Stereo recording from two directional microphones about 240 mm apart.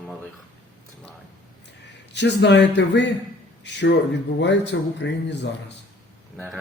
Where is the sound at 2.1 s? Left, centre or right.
Left.